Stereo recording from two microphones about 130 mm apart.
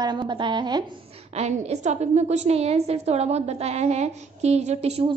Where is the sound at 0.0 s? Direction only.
35° right (ahead or behind).